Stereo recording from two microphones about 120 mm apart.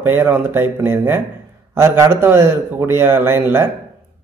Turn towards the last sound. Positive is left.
turn(degrees=-20)  # may be behind; listen again after turning